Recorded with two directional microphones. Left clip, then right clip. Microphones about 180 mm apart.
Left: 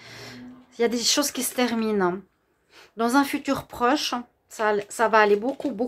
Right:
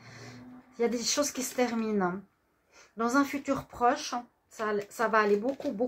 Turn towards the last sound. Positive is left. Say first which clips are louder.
# left 7 dB
turn(degrees=25)  # may be behind; listen again after turning